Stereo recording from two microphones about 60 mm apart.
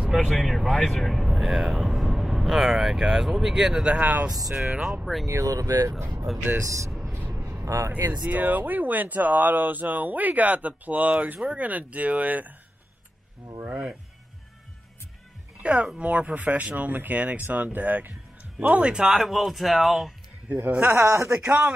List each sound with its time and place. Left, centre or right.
0.1 s speech: centre
4.0 s speech: right
4.3 s speech: centre
4.6 s speech: right
5.2 s speech: right
6.3 s speech: centre
6.6 s speech: right
8.1 s speech: right
13.7 s speech: right
15.6 s speech: centre
19.0 s speech: centre
20.4 s speech: right
20.9 s speech: right
21.3 s speech: right